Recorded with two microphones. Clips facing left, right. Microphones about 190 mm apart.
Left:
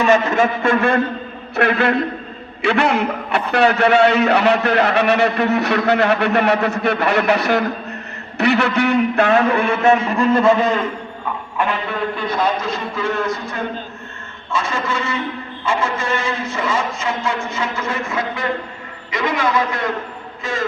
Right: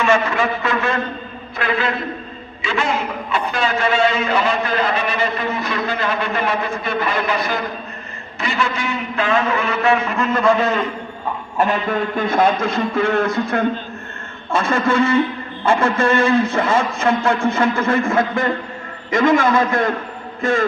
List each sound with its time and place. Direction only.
0.0 s a man's voice: 40° left (ahead or behind)
10.0 s a man's voice: 30° left (ahead or behind)
11.5 s a man's voice: 45° right (ahead or behind)